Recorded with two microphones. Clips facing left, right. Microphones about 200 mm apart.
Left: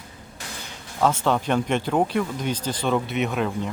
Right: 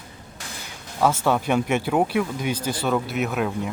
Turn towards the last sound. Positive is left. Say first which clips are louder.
# even
turn(degrees=-5)  # may be behind; listen again after turning